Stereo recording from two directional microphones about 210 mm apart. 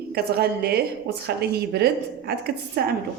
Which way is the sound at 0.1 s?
50° right (ahead or behind).